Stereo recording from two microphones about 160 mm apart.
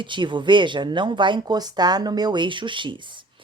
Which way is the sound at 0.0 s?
30° right (ahead or behind).